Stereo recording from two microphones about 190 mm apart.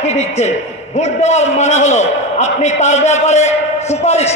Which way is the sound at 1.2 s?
35° left (ahead or behind).